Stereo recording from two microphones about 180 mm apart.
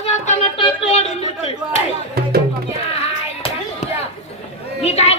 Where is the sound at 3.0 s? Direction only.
35° left (ahead or behind).